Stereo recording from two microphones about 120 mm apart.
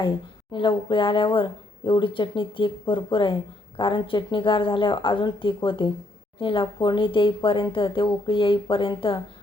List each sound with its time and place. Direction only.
0.5 s speech: 45° left (ahead or behind)